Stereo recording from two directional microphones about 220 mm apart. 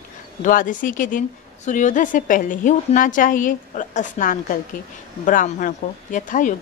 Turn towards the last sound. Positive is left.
turn(degrees=35)  # may be behind; listen again after turning